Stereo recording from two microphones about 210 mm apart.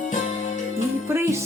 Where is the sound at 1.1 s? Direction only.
10° right (ahead or behind).